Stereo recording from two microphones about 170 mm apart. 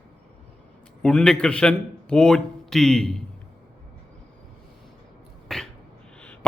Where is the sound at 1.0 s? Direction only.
5° left (ahead or behind).